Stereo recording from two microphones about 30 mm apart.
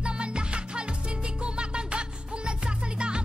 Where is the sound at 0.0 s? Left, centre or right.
Right.